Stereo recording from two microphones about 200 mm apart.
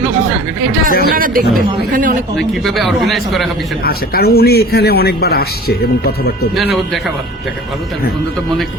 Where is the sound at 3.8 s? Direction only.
50° left (ahead or behind).